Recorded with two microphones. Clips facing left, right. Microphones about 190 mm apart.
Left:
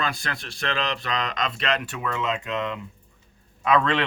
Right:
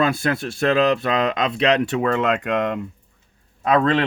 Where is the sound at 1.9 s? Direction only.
70° right (ahead or behind).